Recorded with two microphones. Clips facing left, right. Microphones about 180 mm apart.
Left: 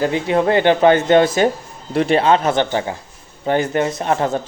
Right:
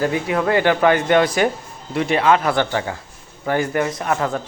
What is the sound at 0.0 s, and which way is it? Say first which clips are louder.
Speech: left 3 dB; 25° left (ahead or behind).